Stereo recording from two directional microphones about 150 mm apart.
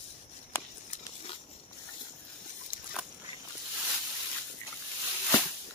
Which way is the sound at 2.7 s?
65° left (ahead or behind).